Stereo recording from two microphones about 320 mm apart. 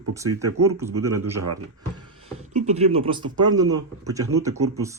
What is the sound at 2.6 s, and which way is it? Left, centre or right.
Speech, centre.